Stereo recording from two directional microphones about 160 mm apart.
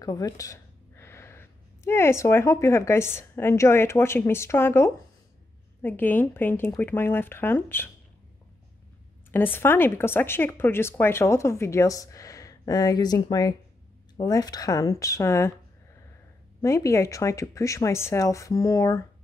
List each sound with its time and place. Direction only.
0.0 s speech: 20° left (ahead or behind)
9.3 s speech: 15° left (ahead or behind)
16.6 s speech: 20° left (ahead or behind)